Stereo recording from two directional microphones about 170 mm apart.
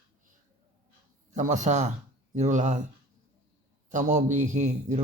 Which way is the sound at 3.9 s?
45° right (ahead or behind).